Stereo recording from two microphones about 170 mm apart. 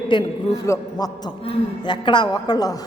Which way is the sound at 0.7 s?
15° left (ahead or behind).